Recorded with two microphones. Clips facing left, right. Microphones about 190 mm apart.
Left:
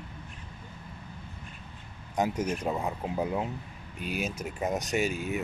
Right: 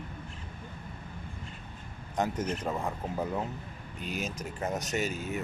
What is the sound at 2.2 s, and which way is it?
Speech, 10° left (ahead or behind).